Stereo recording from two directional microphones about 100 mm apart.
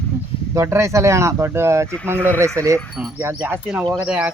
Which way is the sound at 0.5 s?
30° right (ahead or behind).